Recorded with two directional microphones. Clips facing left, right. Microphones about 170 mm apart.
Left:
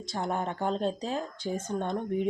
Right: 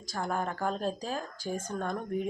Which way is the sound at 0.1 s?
25° left (ahead or behind).